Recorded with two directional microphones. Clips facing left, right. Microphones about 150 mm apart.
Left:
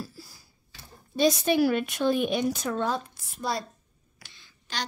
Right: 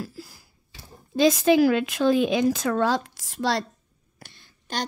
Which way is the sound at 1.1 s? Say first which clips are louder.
Right 5 dB; 90° right.